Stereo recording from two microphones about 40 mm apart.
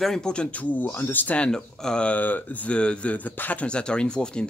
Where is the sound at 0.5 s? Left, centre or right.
Left.